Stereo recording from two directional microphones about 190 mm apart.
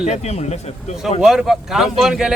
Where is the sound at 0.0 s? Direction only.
35° left (ahead or behind).